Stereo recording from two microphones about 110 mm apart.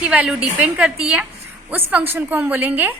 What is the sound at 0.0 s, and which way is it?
A woman's voice, 10° right (ahead or behind).